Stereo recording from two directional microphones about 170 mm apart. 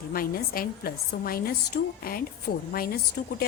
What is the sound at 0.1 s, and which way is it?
A woman's voice, 60° left (ahead or behind).